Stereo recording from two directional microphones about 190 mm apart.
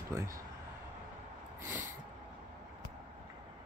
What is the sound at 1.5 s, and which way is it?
Snort, 10° right (ahead or behind).